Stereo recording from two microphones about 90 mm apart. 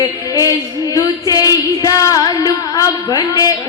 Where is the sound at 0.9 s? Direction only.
40° left (ahead or behind).